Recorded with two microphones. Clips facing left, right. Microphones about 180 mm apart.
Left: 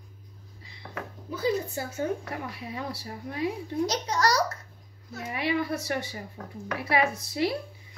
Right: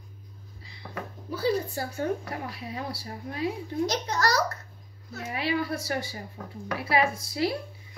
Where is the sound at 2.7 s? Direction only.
30° right (ahead or behind).